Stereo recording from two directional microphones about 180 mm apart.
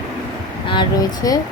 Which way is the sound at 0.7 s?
20° left (ahead or behind).